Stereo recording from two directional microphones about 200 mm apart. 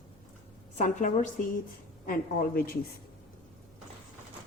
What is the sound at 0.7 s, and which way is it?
A woman's voice, 40° left (ahead or behind).